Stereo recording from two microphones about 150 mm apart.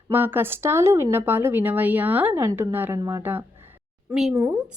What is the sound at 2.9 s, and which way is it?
Speech, 25° right (ahead or behind).